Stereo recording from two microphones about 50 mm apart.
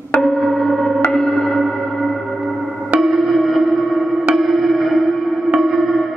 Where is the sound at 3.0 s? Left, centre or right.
Centre.